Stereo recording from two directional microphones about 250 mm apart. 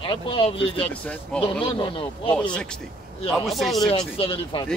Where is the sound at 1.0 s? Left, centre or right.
Centre.